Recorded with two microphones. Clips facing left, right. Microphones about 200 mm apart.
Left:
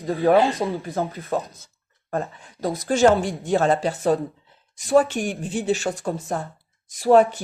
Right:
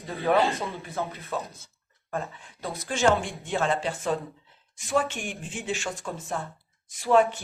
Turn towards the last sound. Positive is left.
turn(degrees=40)  # may be behind; listen again after turning